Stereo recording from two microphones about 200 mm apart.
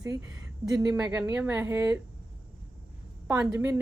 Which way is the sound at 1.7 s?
15° right (ahead or behind).